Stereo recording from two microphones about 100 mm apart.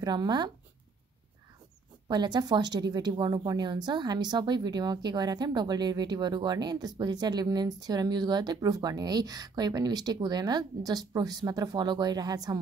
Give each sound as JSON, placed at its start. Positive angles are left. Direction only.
{"t": 0.0, "sound": "a woman's voice", "side_deg": -45}
{"t": 2.0, "sound": "a woman's voice", "side_deg": -45}